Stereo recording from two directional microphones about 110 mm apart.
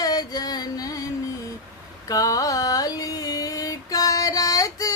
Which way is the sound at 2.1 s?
35° left (ahead or behind).